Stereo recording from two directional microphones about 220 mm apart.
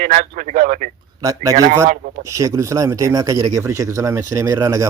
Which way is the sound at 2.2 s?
15° right (ahead or behind).